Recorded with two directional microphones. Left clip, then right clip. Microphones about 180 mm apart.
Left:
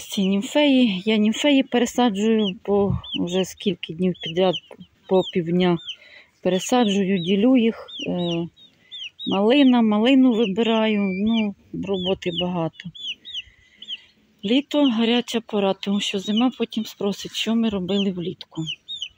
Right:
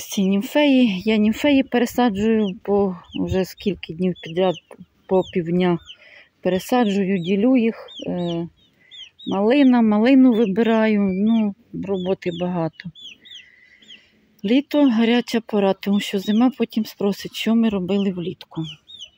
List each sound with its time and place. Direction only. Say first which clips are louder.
0.0 s speech: right 1 dB; 15° right (ahead or behind)
14.7 s speech: right 3 dB; 15° right (ahead or behind)
16.0 s speech: even; 80° right
16.3 s speech: right 4 dB; 20° right (ahead or behind)
16.6 s speech: right 3 dB; 75° right (ahead or behind)
17.5 s speech: right 5 dB; 20° right (ahead or behind)